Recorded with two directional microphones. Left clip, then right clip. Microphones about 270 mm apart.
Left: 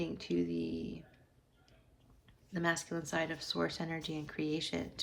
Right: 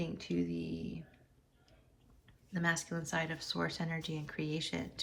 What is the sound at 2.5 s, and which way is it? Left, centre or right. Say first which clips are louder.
Speech: even; centre.